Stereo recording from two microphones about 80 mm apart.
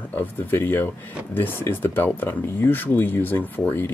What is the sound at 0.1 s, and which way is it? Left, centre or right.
Speech, left.